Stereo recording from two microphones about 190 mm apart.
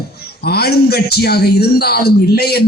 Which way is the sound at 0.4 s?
55° left (ahead or behind).